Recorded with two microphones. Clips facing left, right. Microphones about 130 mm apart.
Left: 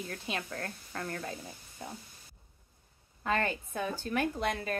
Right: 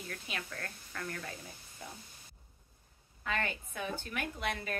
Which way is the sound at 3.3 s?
40° left (ahead or behind).